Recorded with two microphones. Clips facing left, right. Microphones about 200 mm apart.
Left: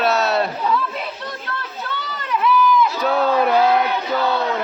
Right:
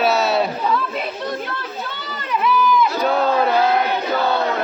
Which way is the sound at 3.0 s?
5° left (ahead or behind).